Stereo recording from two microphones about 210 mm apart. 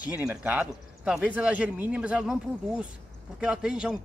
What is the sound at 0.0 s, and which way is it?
Speech, 5° right (ahead or behind).